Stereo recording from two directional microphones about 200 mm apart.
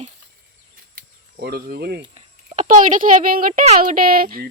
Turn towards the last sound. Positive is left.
turn(degrees=-45)  # may be behind; listen again after turning